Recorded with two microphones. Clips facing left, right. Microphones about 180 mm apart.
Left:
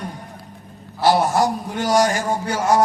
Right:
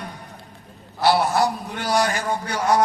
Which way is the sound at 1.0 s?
45° left (ahead or behind).